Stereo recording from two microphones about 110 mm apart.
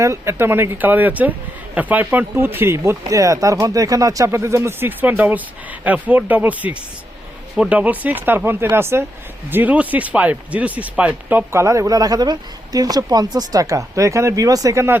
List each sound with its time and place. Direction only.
0.0 s speech: 25° right (ahead or behind)